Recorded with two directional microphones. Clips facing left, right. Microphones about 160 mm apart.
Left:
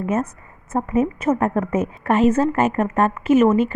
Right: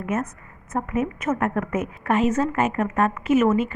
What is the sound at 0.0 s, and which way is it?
A woman's voice, 30° left (ahead or behind).